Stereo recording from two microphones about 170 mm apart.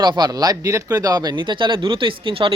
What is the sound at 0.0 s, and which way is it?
Speech, 25° right (ahead or behind).